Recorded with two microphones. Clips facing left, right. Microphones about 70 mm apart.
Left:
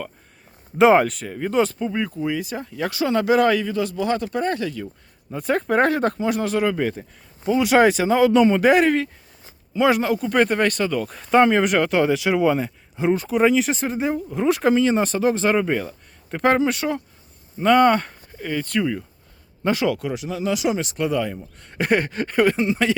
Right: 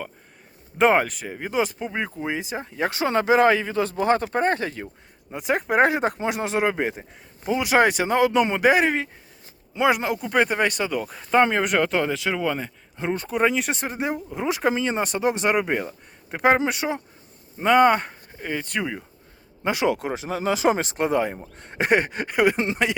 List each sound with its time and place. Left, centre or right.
0.8 s speech: centre
1.9 s speech: right
5.3 s speech: centre
7.6 s speech: centre
11.1 s speech: centre
22.5 s speech: right